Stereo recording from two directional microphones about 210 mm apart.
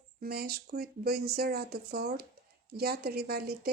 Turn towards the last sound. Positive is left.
turn(degrees=-45)  # may be behind; listen again after turning